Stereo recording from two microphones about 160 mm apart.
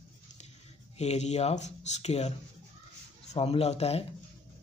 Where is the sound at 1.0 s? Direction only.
45° left (ahead or behind).